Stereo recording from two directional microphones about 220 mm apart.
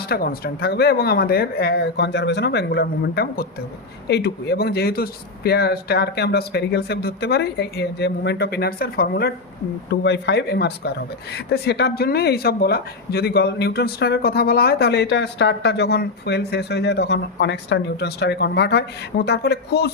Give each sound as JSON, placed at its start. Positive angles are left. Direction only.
{"t": 0.1, "sound": "speech", "side_deg": 40}